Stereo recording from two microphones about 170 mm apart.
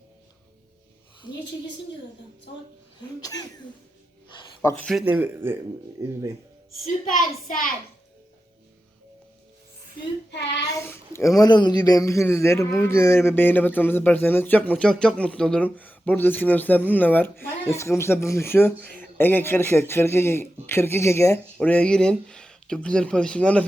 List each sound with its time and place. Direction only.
3.2 s speech: 20° left (ahead or behind)
4.8 s speech: centre (ahead or behind)
5.0 s speech: 10° right (ahead or behind)
7.0 s a woman's voice: 50° left (ahead or behind)
10.6 s a child's voice: 20° left (ahead or behind)